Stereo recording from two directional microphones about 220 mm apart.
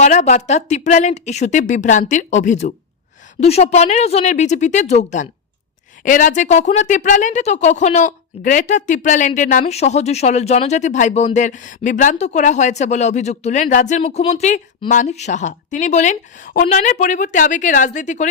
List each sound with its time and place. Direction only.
0.0 s speech: 35° left (ahead or behind)